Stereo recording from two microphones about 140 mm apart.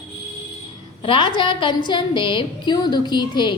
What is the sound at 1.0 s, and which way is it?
A woman's voice, 40° left (ahead or behind).